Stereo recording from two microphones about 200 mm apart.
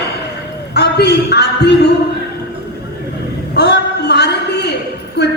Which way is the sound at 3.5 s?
55° left (ahead or behind).